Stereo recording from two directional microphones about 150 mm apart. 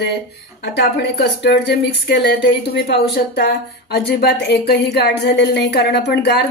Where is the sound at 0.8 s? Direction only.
90° left.